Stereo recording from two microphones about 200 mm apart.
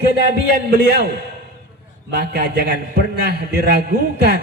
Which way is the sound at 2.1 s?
55° right (ahead or behind).